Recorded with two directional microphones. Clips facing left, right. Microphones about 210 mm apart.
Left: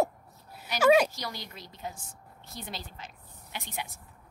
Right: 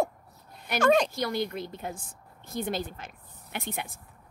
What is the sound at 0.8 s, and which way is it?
Speech, 5° left (ahead or behind).